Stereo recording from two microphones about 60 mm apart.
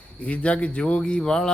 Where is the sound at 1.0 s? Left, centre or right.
Centre.